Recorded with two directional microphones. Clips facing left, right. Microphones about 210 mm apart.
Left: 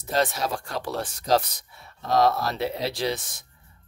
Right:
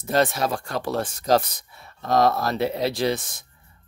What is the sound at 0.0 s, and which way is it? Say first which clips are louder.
Speech: right 3 dB; 55° right (ahead or behind).